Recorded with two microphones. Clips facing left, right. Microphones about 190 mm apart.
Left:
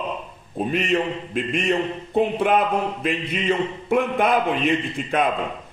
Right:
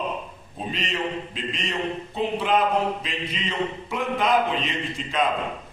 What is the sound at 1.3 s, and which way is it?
A man's voice, 55° left (ahead or behind).